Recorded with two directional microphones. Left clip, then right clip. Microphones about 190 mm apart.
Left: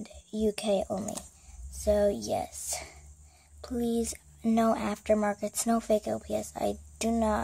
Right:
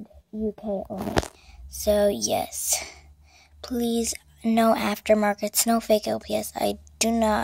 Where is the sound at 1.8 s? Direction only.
10° right (ahead or behind).